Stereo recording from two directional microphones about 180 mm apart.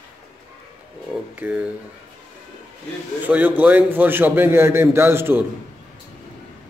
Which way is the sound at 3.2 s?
10° right (ahead or behind).